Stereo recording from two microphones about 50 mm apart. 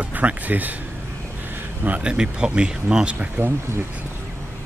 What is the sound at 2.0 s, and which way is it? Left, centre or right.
Speech, centre.